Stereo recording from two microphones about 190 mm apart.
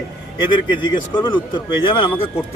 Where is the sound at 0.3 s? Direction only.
25° left (ahead or behind).